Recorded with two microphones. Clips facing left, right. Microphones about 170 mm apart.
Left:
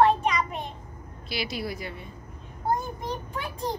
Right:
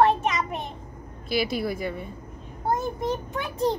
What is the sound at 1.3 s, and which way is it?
Speech, 50° right (ahead or behind).